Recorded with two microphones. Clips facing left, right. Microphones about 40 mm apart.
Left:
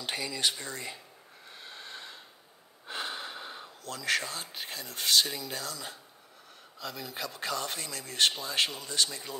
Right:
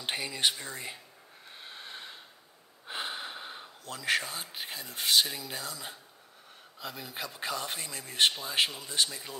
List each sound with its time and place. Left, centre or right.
0.0 s speech: right
0.7 s speech: centre
1.5 s a sound: centre
5.4 s speech: centre